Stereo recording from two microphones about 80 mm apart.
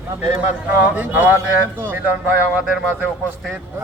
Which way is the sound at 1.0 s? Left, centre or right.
Right.